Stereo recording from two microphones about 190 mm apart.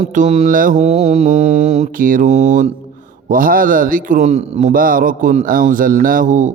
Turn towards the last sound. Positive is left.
turn(degrees=-40)  # may be behind; listen again after turning